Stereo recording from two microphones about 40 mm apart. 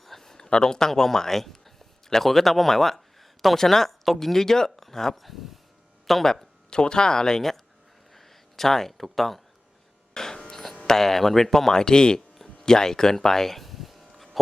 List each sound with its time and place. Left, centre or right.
0.0 s speech: centre
8.1 s a sound: centre
10.2 s mains hum: centre
10.5 s music: centre
10.8 s speech: centre
12.5 s a sound: centre